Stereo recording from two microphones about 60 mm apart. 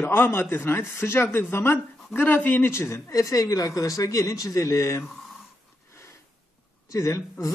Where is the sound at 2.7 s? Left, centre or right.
Left.